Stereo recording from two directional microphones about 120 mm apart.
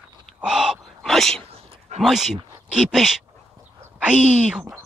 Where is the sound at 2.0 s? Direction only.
5° right (ahead or behind).